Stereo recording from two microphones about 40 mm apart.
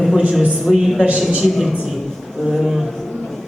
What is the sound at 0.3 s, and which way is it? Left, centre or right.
A man's voice, centre.